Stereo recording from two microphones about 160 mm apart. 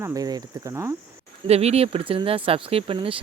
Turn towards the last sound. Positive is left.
turn(degrees=-35)  # may be behind; listen again after turning